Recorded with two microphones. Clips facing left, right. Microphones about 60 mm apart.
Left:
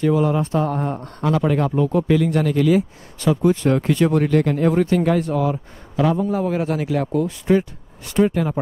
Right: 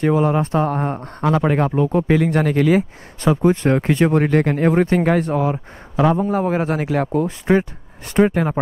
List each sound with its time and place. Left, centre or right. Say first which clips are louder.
0.0 s speech: right 1 dB; right